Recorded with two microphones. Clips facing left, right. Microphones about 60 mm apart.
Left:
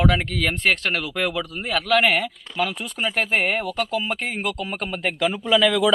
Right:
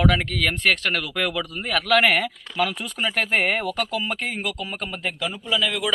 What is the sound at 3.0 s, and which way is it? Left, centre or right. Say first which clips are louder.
Speech: left 1 dB; centre.